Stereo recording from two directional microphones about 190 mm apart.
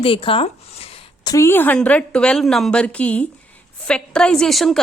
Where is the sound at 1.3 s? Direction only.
15° left (ahead or behind).